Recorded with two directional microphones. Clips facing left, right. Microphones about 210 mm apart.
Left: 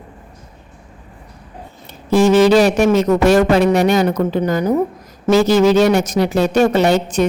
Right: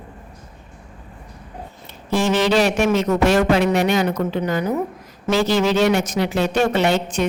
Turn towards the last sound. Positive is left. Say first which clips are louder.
# left 5 dB
turn(degrees=40)  # may be behind; listen again after turning